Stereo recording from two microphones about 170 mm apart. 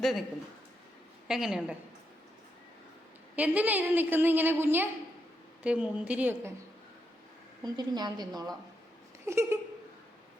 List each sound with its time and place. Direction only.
0.0 s a woman's voice: centre (ahead or behind)
1.3 s a woman's voice: 5° right (ahead or behind)
3.3 s a woman's voice: 10° right (ahead or behind)
7.6 s a woman's voice: 25° right (ahead or behind)